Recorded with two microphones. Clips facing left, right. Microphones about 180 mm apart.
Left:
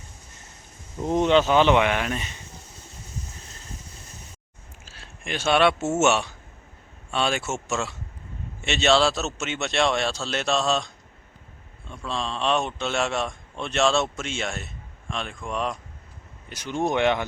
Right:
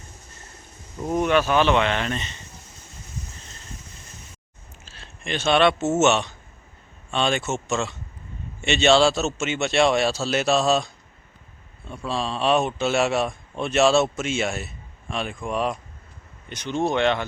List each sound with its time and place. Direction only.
0.9 s speech: 20° left (ahead or behind)
4.9 s speech: 10° left (ahead or behind)
16.5 s speech: 10° left (ahead or behind)